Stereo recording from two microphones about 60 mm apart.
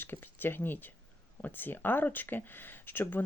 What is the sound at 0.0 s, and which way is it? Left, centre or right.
Speech, left.